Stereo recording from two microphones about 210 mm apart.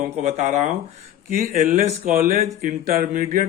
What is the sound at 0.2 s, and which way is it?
Speech, 35° right (ahead or behind).